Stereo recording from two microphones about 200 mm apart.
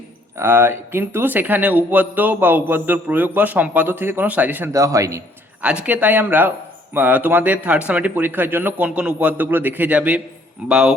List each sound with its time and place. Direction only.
0.3 s speech: 10° right (ahead or behind)